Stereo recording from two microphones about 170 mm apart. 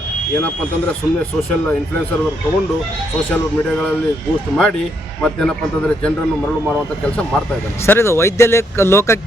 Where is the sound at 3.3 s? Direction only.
5° left (ahead or behind).